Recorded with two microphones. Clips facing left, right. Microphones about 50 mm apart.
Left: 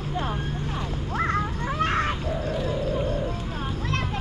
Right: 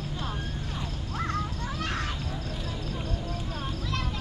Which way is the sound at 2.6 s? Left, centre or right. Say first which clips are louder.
Left 9 dB; left.